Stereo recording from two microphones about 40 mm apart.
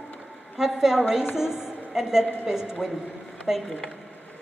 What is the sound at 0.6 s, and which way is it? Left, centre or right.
A woman's voice, centre.